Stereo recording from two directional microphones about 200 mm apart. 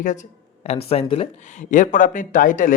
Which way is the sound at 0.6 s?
30° left (ahead or behind).